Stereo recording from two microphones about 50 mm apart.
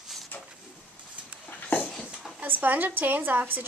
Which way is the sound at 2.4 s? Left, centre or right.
Right.